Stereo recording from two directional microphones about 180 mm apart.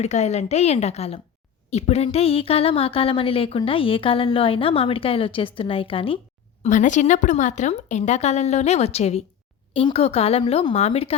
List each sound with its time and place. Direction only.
0.0 s a woman's voice: 40° left (ahead or behind)
6.6 s a woman's voice: 45° left (ahead or behind)